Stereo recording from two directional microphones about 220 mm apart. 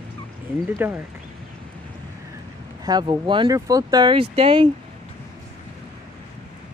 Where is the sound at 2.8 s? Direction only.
20° right (ahead or behind).